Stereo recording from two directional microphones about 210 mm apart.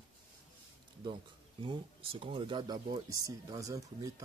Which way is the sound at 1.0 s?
25° right (ahead or behind).